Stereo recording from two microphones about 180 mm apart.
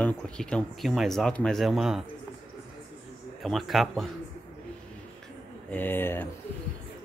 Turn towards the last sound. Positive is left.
turn(degrees=10)  # may be behind; listen again after turning